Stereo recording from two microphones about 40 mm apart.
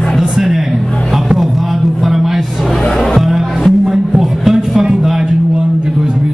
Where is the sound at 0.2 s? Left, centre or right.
Centre.